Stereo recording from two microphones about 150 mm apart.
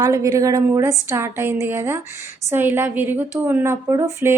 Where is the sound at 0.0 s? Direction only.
20° right (ahead or behind).